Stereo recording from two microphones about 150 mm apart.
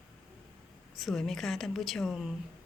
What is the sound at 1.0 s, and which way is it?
Speech, centre (ahead or behind).